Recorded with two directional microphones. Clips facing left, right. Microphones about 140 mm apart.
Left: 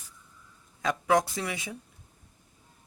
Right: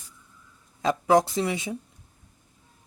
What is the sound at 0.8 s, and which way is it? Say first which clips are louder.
Speech: right 4 dB; 25° right (ahead or behind).